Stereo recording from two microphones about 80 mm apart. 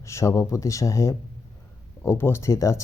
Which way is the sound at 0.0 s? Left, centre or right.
Left.